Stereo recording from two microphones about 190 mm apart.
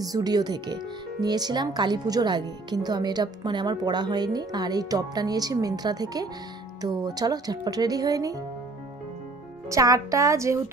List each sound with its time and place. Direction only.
0.0 s speech: 20° right (ahead or behind)
9.7 s speech: 15° right (ahead or behind)